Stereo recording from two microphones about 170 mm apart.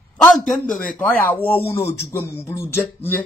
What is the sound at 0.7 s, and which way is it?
Speech, 50° left (ahead or behind).